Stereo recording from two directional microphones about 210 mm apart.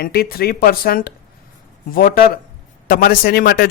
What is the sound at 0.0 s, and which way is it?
Speech, 45° left (ahead or behind).